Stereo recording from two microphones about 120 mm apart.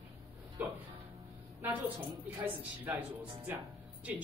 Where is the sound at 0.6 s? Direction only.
15° right (ahead or behind).